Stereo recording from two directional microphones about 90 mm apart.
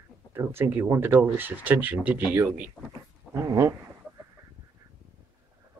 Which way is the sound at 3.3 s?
35° right (ahead or behind).